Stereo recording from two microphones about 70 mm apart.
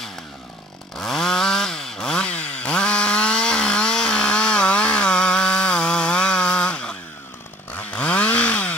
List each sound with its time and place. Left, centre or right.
0.9 s chainsaw: centre